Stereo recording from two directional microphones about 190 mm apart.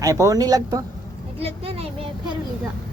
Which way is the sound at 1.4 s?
30° right (ahead or behind).